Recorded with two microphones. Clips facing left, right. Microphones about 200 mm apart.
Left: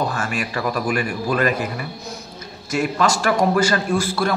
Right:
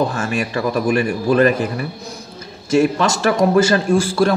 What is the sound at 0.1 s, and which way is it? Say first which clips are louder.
Speech: right 4 dB; 25° right (ahead or behind).